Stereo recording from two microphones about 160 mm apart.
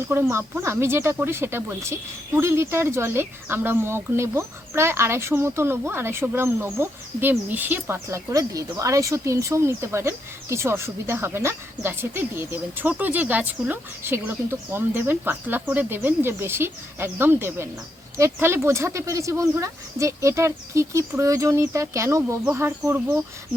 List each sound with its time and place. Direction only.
0.1 s speech: 15° right (ahead or behind)